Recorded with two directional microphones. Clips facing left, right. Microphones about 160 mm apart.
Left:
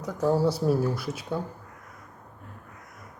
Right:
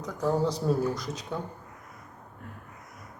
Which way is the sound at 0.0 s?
10° left (ahead or behind).